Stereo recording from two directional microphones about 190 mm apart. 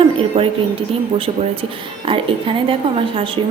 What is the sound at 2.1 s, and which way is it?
A woman's voice, 30° right (ahead or behind).